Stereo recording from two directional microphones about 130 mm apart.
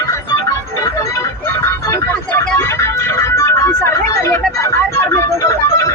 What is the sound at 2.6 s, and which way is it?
Music, 20° left (ahead or behind).